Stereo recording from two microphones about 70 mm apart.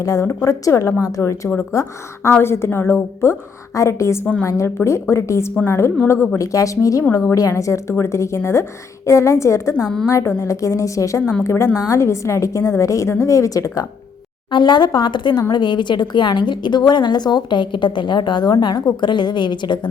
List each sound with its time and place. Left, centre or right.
0.0 s a woman's voice: left
2.3 s a woman's voice: left
14.5 s a woman's voice: left